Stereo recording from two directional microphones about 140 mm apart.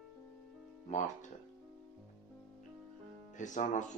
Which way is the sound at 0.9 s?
60° left (ahead or behind).